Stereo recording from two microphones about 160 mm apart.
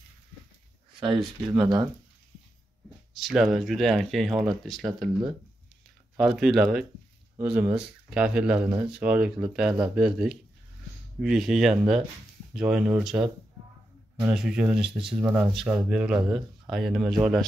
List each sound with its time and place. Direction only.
1.5 s speech: centre (ahead or behind)
3.2 s speech: centre (ahead or behind)
6.1 s speech: centre (ahead or behind)
15.0 s speech: 30° right (ahead or behind)
15.5 s speech: 5° right (ahead or behind)